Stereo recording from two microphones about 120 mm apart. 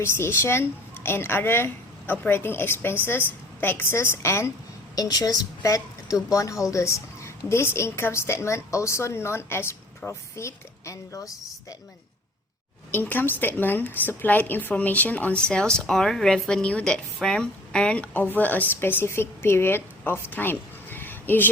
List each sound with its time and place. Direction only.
0.0 s a woman's voice: 20° left (ahead or behind)
12.9 s a woman's voice: 15° left (ahead or behind)